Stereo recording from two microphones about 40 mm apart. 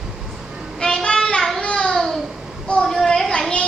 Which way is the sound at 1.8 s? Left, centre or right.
Centre.